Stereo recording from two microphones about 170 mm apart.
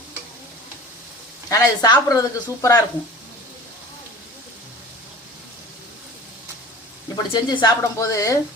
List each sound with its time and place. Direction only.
1.5 s speech: 20° left (ahead or behind)
7.2 s speech: 25° left (ahead or behind)